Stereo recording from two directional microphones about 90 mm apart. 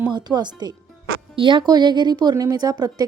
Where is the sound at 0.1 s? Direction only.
55° right (ahead or behind).